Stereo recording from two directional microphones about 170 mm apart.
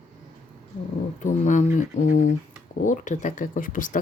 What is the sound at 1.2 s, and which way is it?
Speech, 45° left (ahead or behind).